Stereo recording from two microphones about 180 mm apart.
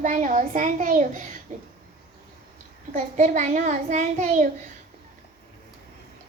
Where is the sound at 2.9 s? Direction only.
45° right (ahead or behind).